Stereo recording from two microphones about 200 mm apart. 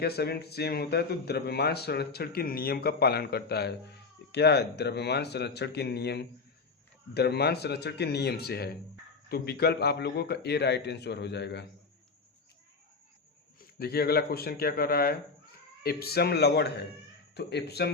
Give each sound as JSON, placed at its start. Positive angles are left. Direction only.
{"t": 0.0, "sound": "a man's voice", "side_deg": 50}
{"t": 13.6, "sound": "a man's voice", "side_deg": 50}